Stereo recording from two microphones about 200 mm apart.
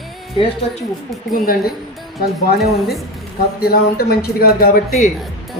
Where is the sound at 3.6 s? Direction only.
50° left (ahead or behind).